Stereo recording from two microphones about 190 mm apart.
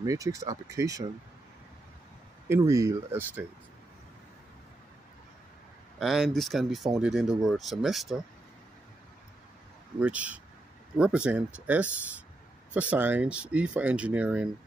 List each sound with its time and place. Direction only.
0.0 s speech: 15° right (ahead or behind)
2.4 s speech: 15° right (ahead or behind)
5.9 s speech: centre (ahead or behind)
9.9 s speech: 5° right (ahead or behind)